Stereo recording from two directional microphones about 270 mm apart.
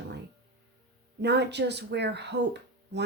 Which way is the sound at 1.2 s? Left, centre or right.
Right.